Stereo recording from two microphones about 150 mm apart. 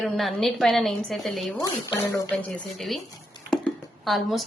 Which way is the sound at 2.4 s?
5° left (ahead or behind).